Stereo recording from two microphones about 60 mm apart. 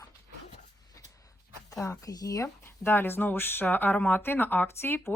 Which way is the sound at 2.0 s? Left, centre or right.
Left.